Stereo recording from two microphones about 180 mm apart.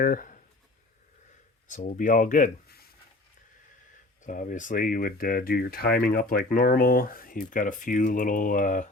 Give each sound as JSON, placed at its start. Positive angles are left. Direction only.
{"t": 0.0, "sound": "speech", "side_deg": 50}
{"t": 1.6, "sound": "speech", "side_deg": 45}
{"t": 4.2, "sound": "speech", "side_deg": 50}